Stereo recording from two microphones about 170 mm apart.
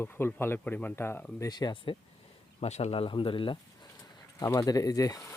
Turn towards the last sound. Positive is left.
turn(degrees=20)  # may be behind; listen again after turning